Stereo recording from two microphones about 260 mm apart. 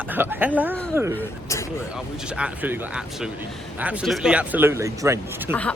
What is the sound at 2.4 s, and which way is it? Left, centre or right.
Speech, centre.